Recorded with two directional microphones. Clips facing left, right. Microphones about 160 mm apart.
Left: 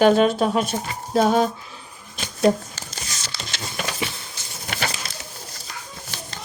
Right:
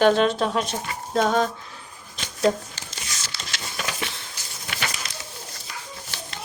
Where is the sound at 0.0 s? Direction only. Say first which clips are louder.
Left 3 dB; 10° left (ahead or behind).